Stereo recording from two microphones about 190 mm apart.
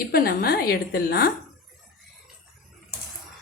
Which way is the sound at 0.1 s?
55° left (ahead or behind).